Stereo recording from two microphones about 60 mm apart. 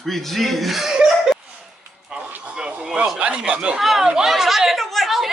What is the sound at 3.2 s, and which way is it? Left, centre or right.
Speech, centre.